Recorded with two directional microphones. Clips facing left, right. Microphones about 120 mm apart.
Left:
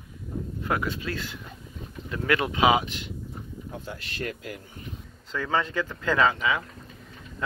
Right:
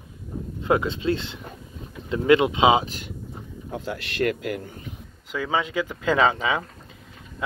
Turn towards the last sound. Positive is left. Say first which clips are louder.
# right 2 dB
turn(degrees=-25)  # may be behind; listen again after turning